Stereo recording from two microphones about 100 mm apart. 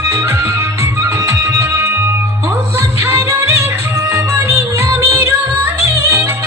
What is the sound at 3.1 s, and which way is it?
Music, 25° right (ahead or behind).